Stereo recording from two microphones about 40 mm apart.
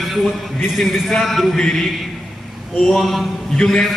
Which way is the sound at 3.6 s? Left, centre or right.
Centre.